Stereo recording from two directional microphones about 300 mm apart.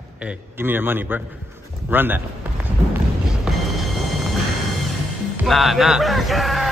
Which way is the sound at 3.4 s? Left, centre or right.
Centre.